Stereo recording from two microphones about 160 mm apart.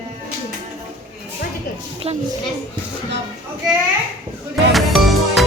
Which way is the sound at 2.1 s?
40° right (ahead or behind).